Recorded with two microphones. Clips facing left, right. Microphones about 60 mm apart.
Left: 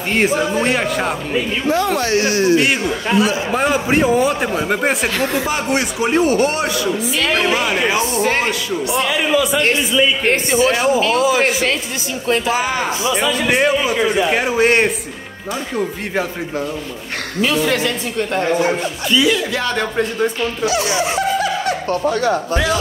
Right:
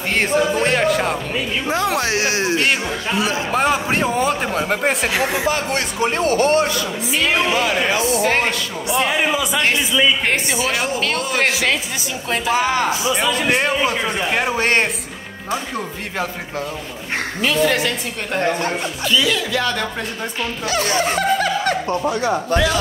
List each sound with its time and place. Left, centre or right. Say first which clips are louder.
0.1 s a man's voice: left 1 dB; centre
1.7 s speech: left 3 dB; centre
3.5 s a man's voice: left 1 dB; centre
5.1 s speech: even; centre
5.5 s a man's voice: left 2 dB; centre
10.3 s speech: left 5 dB; left
10.9 s a man's voice: left 7 dB; centre
13.2 s a man's voice: left 4 dB; centre
19.0 s a man's voice: left 3 dB; centre
20.6 s snicker: left 1 dB; right